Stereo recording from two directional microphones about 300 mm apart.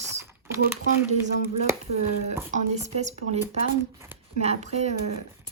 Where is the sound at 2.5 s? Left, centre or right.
Right.